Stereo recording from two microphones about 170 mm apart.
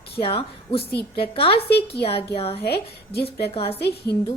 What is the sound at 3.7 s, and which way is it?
Speech, 70° left (ahead or behind).